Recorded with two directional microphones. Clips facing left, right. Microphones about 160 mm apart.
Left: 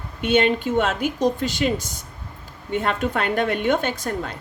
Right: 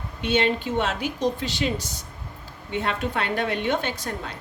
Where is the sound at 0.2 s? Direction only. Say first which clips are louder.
Left 4 dB; 50° left (ahead or behind).